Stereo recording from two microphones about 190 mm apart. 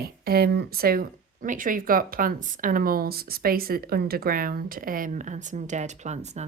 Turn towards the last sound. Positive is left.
turn(degrees=-35)  # may be behind; listen again after turning